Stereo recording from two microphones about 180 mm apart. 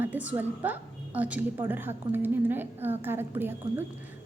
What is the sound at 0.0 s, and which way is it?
A woman's voice, 10° right (ahead or behind).